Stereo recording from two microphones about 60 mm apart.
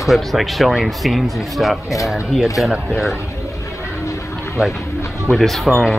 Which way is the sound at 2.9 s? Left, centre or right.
Centre.